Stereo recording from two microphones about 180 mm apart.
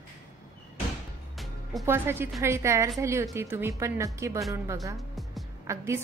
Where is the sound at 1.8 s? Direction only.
10° right (ahead or behind).